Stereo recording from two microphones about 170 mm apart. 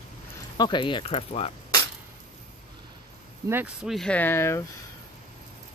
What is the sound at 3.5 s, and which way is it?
Speech, 10° right (ahead or behind).